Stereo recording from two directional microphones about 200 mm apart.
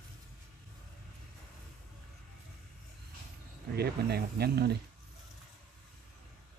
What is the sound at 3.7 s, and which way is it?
Speech, 55° right (ahead or behind).